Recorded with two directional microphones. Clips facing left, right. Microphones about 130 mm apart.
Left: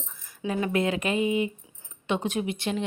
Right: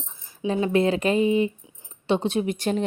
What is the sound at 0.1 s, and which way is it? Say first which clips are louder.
A woman's voice: right 4 dB; 25° right (ahead or behind).